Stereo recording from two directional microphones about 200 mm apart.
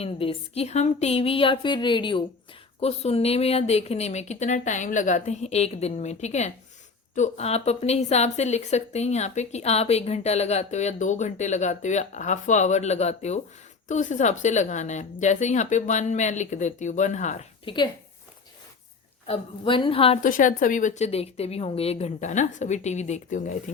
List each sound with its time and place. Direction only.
0.0 s a woman's voice: 30° left (ahead or behind)
17.7 s a woman's voice: 25° left (ahead or behind)
19.3 s a woman's voice: 25° left (ahead or behind)
20.2 s speech: 40° left (ahead or behind)